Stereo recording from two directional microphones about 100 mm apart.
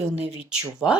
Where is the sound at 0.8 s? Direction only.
5° left (ahead or behind).